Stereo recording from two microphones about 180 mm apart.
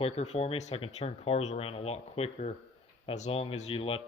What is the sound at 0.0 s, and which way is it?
A man's voice, 35° left (ahead or behind).